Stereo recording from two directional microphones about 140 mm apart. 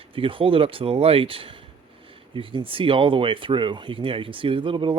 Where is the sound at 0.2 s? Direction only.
40° right (ahead or behind).